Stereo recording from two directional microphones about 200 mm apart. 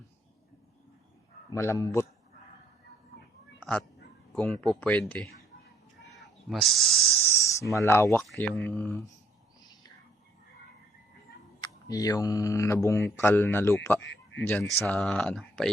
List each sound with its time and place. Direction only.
1.5 s speech: 15° left (ahead or behind)
3.6 s speech: 5° left (ahead or behind)
7.3 s speech: 15° left (ahead or behind)
11.6 s speech: 20° left (ahead or behind)